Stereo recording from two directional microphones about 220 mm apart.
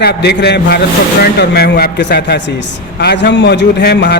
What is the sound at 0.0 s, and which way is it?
A man's voice, 45° left (ahead or behind).